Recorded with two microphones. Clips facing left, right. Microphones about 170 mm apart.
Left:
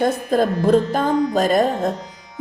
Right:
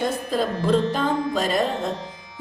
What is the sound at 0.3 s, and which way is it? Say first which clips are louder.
Music: left 5 dB; 50° left (ahead or behind).